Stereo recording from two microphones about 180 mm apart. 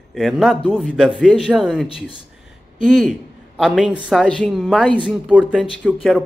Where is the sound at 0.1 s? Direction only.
Centre (ahead or behind).